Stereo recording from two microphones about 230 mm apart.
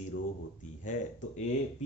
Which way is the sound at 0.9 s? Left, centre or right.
Left.